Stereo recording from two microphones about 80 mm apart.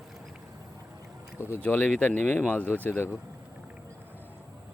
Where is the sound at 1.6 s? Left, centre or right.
Centre.